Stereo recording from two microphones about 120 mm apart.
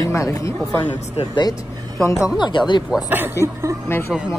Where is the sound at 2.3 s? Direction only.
40° left (ahead or behind).